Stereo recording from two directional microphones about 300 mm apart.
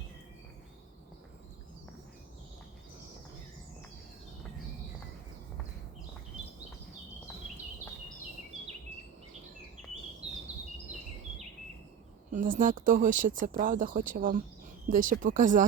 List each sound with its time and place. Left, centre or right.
12.3 s speech: right